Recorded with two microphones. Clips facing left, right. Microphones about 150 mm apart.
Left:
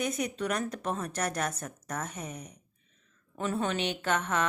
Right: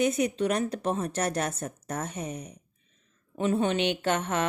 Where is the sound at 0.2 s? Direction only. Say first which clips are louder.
Right 5 dB; 30° right (ahead or behind).